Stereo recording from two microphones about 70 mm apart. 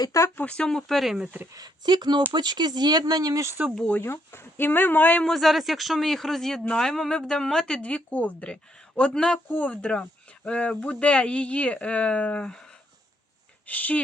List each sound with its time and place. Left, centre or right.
0.4 s speech: centre
1.5 s speech: right
3.8 s speech: left
4.1 s speech: left
5.2 s a man's voice: centre
13.7 s speech: left